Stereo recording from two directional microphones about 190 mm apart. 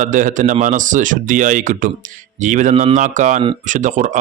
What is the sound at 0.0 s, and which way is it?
Speech, 45° right (ahead or behind).